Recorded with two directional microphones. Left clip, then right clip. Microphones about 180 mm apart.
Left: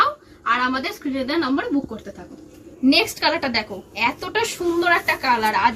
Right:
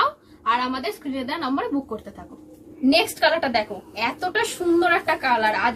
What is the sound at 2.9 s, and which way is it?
A woman's voice, 10° right (ahead or behind).